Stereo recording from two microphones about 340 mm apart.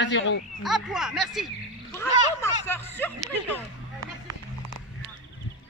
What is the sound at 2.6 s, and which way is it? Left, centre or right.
Speech, centre.